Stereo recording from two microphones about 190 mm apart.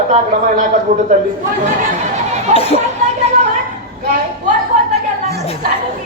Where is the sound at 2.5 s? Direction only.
35° right (ahead or behind).